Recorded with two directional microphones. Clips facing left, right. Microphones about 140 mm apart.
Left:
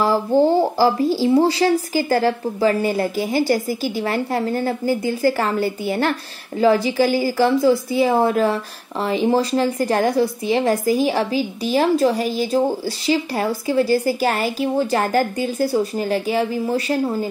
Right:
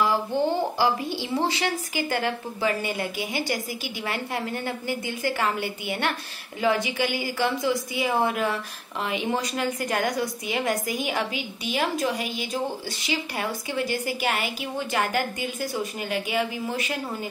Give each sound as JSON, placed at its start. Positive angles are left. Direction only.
{"t": 0.0, "sound": "speech", "side_deg": 40}